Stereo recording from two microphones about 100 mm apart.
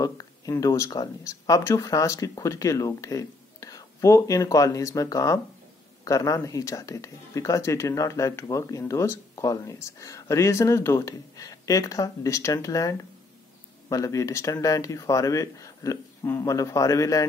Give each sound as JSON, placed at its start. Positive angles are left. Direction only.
{"t": 0.0, "sound": "speech", "side_deg": 35}